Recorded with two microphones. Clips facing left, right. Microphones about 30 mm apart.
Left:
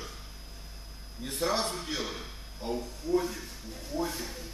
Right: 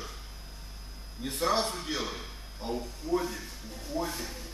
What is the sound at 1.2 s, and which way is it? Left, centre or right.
Speech, centre.